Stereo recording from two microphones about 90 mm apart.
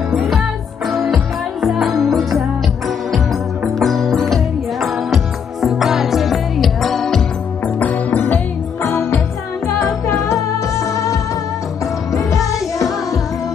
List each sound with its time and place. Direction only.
0.1 s music: centre (ahead or behind)
3.6 s music: centre (ahead or behind)
7.8 s music: 20° left (ahead or behind); by 11.1 s 35° left (ahead or behind)
12.3 s music: 35° left (ahead or behind)